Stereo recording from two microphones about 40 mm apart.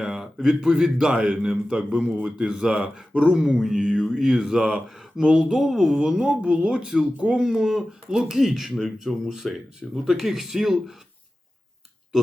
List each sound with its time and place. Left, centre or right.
0.0 s a man's voice: centre
1.9 s speech: right
4.2 s speech: centre
5.5 s speech: centre